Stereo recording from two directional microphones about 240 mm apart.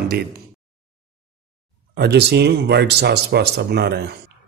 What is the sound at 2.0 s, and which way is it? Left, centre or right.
Speech, right.